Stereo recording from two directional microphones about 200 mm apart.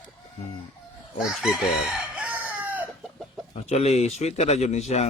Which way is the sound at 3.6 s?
30° left (ahead or behind).